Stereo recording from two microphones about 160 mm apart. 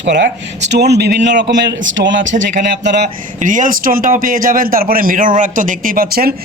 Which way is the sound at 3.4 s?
50° right (ahead or behind).